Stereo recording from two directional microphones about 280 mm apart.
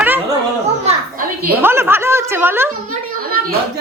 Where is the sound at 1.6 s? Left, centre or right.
Centre.